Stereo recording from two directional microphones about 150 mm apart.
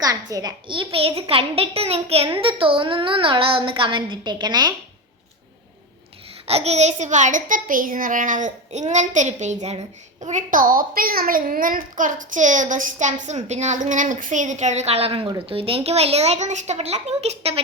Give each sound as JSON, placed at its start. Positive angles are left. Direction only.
{"t": 0.0, "sound": "a woman's voice", "side_deg": -25}
{"t": 6.5, "sound": "a child's voice", "side_deg": -45}
{"t": 10.3, "sound": "a child's voice", "side_deg": -65}